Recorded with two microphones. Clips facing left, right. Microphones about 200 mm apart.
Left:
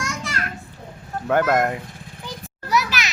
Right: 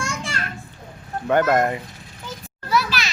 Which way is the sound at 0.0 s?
30° right (ahead or behind).